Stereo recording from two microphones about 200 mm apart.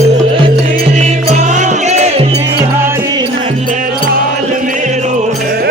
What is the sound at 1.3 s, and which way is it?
Music, 35° right (ahead or behind).